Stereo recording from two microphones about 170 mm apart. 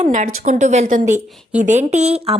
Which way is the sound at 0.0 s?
45° right (ahead or behind).